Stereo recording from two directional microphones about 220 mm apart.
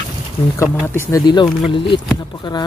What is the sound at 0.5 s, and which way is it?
Speech, 10° left (ahead or behind).